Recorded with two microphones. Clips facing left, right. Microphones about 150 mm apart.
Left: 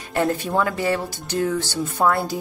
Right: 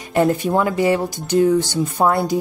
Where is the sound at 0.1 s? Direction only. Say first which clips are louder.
Right 5 dB; 15° right (ahead or behind).